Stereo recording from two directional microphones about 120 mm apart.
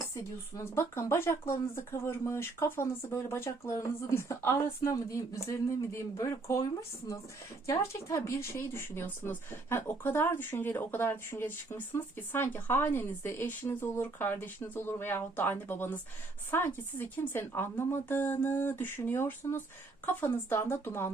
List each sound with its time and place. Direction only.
0.1 s speech: 25° left (ahead or behind)
7.7 s a woman's voice: 25° left (ahead or behind)